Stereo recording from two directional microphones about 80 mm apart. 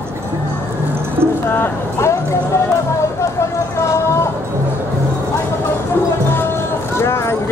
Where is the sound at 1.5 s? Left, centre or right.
Left.